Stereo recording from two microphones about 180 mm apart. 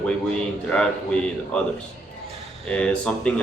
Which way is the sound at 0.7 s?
5° left (ahead or behind).